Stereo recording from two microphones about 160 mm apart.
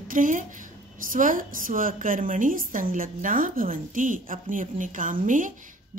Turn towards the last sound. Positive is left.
turn(degrees=-55)  # may be behind; listen again after turning